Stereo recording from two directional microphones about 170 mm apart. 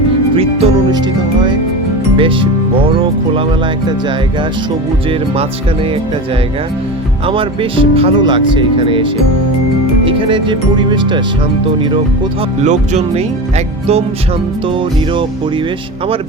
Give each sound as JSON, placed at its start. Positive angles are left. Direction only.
{"t": 0.3, "sound": "speech", "side_deg": -30}
{"t": 2.1, "sound": "speech", "side_deg": -30}
{"t": 7.3, "sound": "speech", "side_deg": -30}
{"t": 10.1, "sound": "speech", "side_deg": -30}
{"t": 12.6, "sound": "speech", "side_deg": -45}